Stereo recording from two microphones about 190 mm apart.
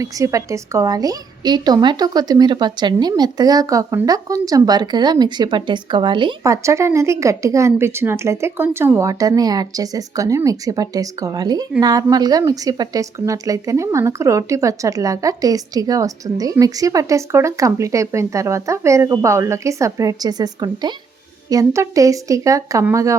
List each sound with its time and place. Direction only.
0.0 s a woman's voice: 15° right (ahead or behind)